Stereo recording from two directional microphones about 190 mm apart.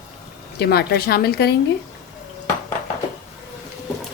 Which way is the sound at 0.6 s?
55° left (ahead or behind).